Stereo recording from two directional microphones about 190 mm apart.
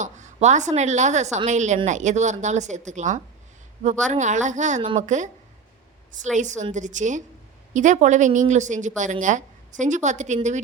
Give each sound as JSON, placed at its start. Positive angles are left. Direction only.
{"t": 0.0, "sound": "a woman's voice", "side_deg": -40}
{"t": 6.3, "sound": "a woman's voice", "side_deg": -40}